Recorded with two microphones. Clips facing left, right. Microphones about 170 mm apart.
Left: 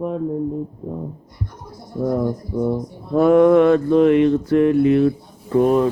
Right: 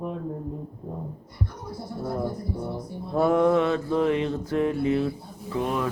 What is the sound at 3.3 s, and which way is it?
Mantra, 65° left (ahead or behind).